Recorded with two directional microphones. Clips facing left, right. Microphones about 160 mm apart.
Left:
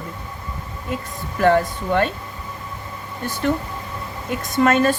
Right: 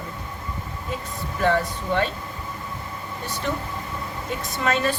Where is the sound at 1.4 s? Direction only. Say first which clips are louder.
Left 5 dB; 55° left (ahead or behind).